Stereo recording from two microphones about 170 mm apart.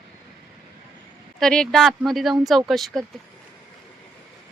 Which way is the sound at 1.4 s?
5° left (ahead or behind).